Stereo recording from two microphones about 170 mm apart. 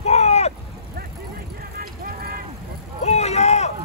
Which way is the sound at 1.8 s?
60° right (ahead or behind).